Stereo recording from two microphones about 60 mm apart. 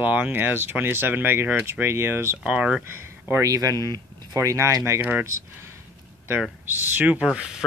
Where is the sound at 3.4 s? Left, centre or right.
Right.